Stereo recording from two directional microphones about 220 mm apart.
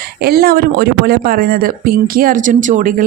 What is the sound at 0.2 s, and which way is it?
Speech, 45° right (ahead or behind).